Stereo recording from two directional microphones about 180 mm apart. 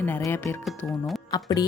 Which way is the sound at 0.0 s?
10° left (ahead or behind).